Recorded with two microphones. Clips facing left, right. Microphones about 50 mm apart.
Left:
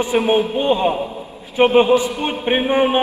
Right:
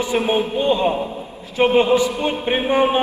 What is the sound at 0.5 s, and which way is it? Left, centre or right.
A man's voice, left.